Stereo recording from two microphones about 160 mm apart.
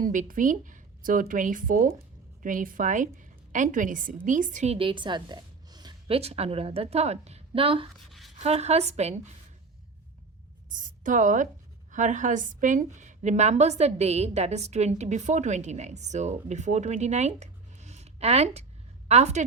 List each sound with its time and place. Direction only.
0.0 s a woman's voice: 55° right (ahead or behind); by 5.9 s 25° right (ahead or behind)
6.1 s a woman's voice: 40° right (ahead or behind)
10.7 s a sound: 55° right (ahead or behind)
11.9 s a woman's voice: 50° right (ahead or behind)